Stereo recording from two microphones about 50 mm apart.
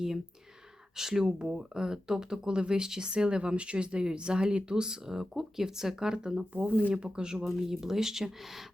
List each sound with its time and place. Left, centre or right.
0.9 s speech: centre
6.5 s speech: right
6.9 s speech: centre
7.3 s speech: centre